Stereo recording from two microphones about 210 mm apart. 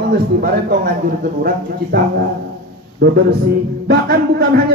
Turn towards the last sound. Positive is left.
turn(degrees=-45)  # may be behind; listen again after turning